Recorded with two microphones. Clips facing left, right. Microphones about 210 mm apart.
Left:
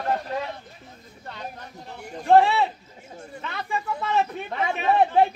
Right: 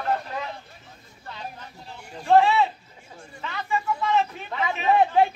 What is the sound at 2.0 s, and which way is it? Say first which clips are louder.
Speech: left 1 dB; 55° left (ahead or behind).